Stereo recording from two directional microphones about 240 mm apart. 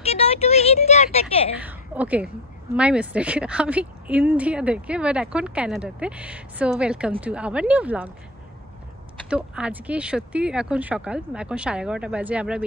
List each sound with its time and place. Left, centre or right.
0.0 s a sound: left
1.6 s a woman's voice: centre
9.3 s a woman's voice: centre